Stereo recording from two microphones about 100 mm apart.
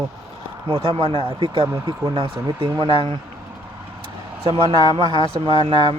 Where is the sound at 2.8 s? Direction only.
55° right (ahead or behind).